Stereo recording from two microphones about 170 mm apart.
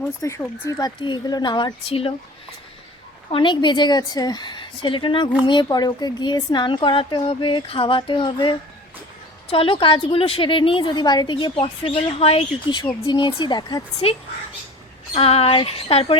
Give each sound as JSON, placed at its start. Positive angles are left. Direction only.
{"t": 0.2, "sound": "a woman's voice", "side_deg": 15}
{"t": 3.3, "sound": "a woman's voice", "side_deg": 30}